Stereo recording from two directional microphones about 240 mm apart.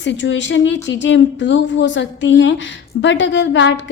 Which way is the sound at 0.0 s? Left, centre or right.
Left.